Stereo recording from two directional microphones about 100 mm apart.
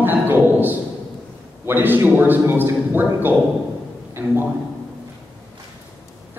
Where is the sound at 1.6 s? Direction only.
20° right (ahead or behind).